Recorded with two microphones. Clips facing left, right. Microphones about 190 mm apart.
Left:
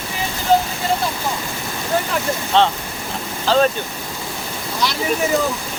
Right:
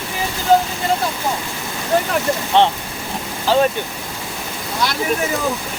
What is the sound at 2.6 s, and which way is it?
Speech, 15° right (ahead or behind).